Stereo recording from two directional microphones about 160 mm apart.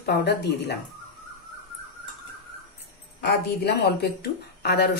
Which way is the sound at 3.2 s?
90° left.